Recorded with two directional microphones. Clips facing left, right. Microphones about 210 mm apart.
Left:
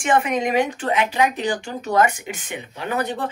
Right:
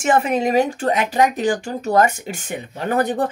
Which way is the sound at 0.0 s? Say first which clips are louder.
Right 2 dB; 40° right (ahead or behind).